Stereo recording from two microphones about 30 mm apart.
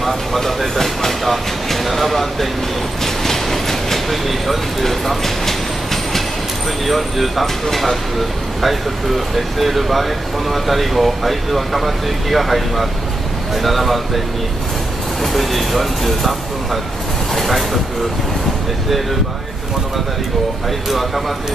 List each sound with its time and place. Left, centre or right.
0.0 s speech: centre
6.9 s speech: centre
15.3 s speech: centre
17.3 s train: centre